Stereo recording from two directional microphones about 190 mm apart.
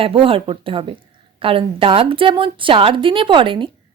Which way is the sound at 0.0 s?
30° right (ahead or behind).